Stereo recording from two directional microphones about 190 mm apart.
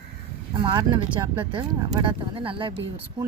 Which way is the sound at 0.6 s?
20° right (ahead or behind).